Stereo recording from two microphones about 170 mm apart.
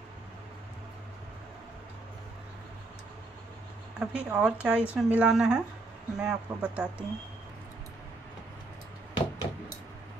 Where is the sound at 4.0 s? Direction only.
5° right (ahead or behind).